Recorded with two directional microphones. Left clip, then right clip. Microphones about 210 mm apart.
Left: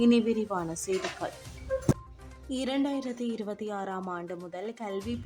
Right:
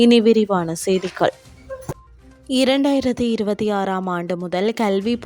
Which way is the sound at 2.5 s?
45° right (ahead or behind).